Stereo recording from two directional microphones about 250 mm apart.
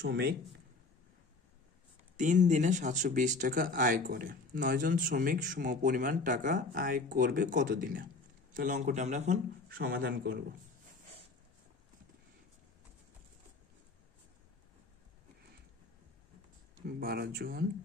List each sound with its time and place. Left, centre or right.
0.0 s speech: right
2.1 s speech: right
16.7 s speech: right